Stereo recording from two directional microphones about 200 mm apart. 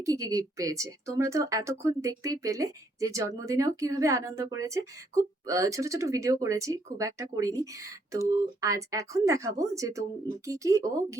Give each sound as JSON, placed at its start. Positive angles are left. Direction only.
{"t": 0.0, "sound": "speech", "side_deg": -15}